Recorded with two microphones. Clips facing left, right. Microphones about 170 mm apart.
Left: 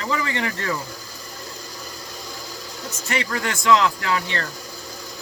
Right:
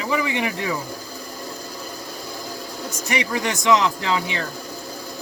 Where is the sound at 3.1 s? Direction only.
15° right (ahead or behind).